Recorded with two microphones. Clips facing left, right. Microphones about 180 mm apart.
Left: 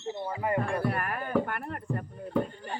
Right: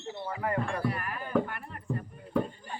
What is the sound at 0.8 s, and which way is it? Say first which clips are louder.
Speech: left 2 dB; 55° left (ahead or behind).